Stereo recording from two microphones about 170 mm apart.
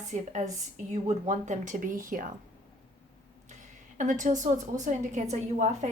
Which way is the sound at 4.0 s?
45° right (ahead or behind).